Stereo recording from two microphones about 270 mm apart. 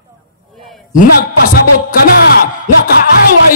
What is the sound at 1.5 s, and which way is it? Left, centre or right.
Music, left.